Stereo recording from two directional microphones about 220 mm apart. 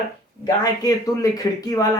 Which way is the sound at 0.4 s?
15° left (ahead or behind).